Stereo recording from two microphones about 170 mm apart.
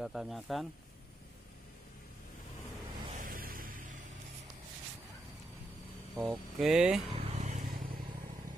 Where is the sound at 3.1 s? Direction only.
55° right (ahead or behind).